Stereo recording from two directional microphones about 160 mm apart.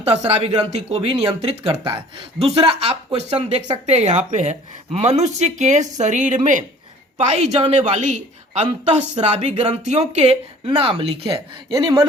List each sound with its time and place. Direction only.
0.2 s speech: 40° right (ahead or behind); by 12.0 s 25° right (ahead or behind)